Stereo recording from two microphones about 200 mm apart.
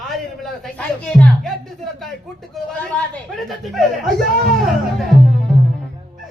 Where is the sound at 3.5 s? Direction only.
Centre (ahead or behind).